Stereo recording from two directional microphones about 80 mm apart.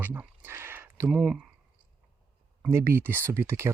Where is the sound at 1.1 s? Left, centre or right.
Centre.